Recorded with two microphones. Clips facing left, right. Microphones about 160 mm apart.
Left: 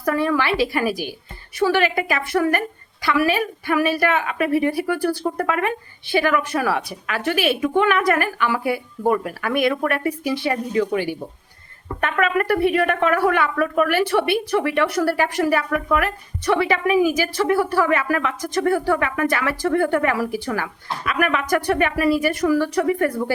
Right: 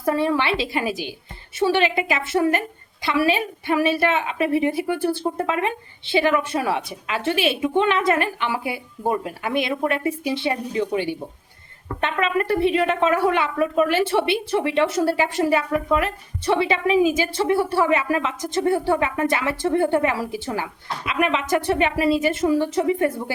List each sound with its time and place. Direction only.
0.0 s speech: 25° right (ahead or behind)